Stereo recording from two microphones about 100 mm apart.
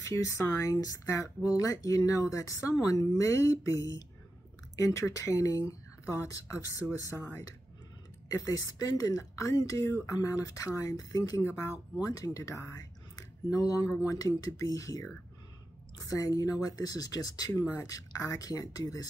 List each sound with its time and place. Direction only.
0.1 s speech: 30° left (ahead or behind)
8.3 s speech: 35° left (ahead or behind)
17.6 s speech: 25° left (ahead or behind)
17.8 s speech: 35° left (ahead or behind)